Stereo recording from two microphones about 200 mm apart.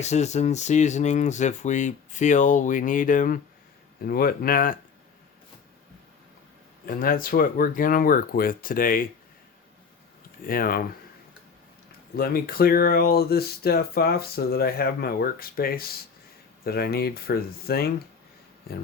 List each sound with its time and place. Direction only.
0.0 s speech: 35° left (ahead or behind)
6.8 s speech: 45° left (ahead or behind)
10.4 s speech: 45° left (ahead or behind)
12.1 s speech: 45° left (ahead or behind)